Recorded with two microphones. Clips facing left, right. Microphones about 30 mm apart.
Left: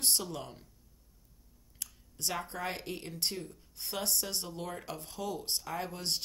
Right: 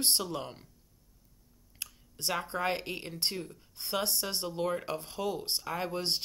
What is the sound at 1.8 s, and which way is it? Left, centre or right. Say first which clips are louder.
Speech: right 1 dB; right.